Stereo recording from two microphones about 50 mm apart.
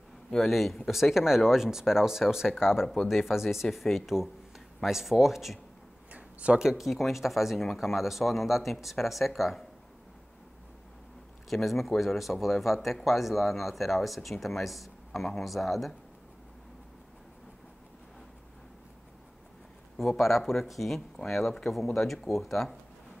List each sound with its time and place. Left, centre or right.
0.3 s speech: centre
6.1 s a sound: right
6.6 s speech: centre
11.4 s speech: centre
20.0 s speech: centre